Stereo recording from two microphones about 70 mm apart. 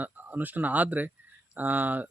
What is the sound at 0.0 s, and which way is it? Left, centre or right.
Speech, right.